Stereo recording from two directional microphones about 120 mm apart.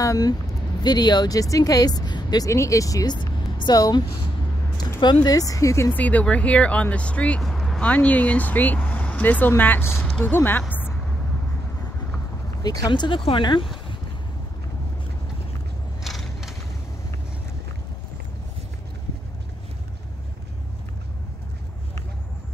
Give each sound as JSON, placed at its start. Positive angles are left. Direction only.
{"t": 0.0, "sound": "speech", "side_deg": 30}
{"t": 5.2, "sound": "speech", "side_deg": 30}
{"t": 10.0, "sound": "speech", "side_deg": 5}
{"t": 10.3, "sound": "speech", "side_deg": 15}
{"t": 12.6, "sound": "speech", "side_deg": 35}
{"t": 16.0, "sound": "a sound", "side_deg": 0}